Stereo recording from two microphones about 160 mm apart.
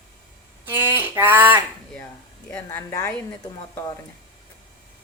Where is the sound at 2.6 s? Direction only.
20° left (ahead or behind).